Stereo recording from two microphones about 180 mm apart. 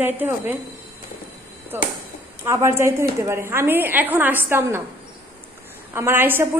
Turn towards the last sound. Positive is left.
turn(degrees=-10)  # may be behind; listen again after turning